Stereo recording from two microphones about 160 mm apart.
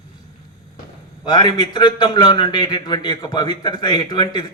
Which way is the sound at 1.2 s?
25° left (ahead or behind).